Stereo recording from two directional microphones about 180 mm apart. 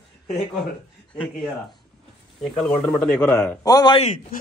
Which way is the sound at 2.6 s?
5° left (ahead or behind).